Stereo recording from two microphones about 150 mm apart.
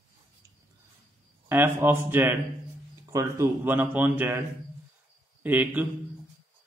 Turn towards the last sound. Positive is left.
turn(degrees=-10)  # may be behind; listen again after turning